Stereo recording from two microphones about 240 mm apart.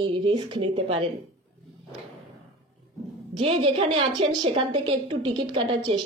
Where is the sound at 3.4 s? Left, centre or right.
Right.